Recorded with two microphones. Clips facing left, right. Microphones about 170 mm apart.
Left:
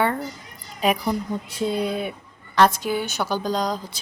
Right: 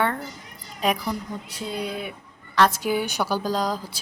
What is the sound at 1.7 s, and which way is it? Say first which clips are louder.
Speech: left 3 dB; 30° left (ahead or behind).